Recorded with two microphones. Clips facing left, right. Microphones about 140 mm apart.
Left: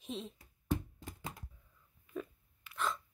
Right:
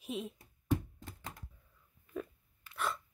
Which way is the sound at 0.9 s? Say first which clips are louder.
Left 2 dB; centre (ahead or behind).